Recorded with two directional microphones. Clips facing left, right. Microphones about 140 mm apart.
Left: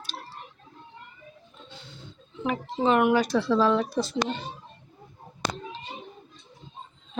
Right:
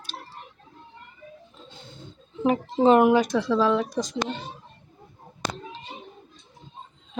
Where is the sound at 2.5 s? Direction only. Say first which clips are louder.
Right 6 dB; 35° right (ahead or behind).